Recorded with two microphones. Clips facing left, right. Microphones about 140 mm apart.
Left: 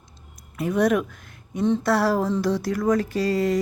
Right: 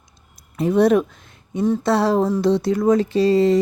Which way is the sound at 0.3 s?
30° right (ahead or behind).